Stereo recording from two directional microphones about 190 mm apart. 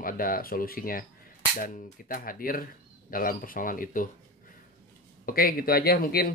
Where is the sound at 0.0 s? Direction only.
50° left (ahead or behind).